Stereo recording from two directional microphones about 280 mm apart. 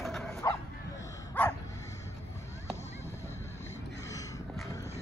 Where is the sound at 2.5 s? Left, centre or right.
Left.